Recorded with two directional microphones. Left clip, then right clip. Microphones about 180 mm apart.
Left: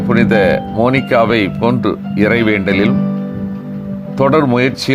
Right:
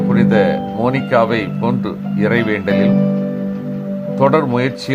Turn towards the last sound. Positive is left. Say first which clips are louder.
# left 4 dB
turn(degrees=25)  # may be behind; listen again after turning